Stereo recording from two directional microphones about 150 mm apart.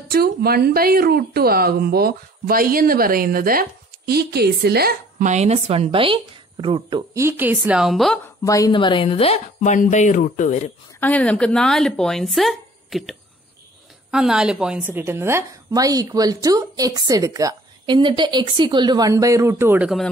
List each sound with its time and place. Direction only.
0.1 s speech: 90° right
5.2 s speech: 50° right (ahead or behind); by 7.1 s 35° right (ahead or behind)
7.2 s speech: 15° right (ahead or behind)
7.8 s speech: centre (ahead or behind)
8.4 s speech: 25° left (ahead or behind)
8.7 s a woman's voice: 35° left (ahead or behind)
9.6 s speech: 55° left (ahead or behind)
11.0 s speech: 10° left (ahead or behind)
14.1 s a woman's voice: 5° right (ahead or behind)